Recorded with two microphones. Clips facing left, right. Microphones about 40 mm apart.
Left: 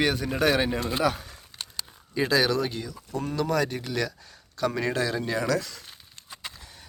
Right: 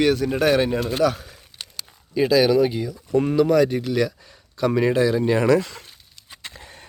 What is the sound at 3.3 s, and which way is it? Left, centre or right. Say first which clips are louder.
Speech: right 7 dB; centre.